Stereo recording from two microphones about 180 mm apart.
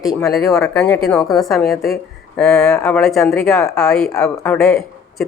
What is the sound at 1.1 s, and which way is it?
A woman's voice, centre (ahead or behind).